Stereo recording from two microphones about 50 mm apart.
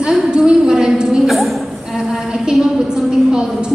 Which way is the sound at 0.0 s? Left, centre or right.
Centre.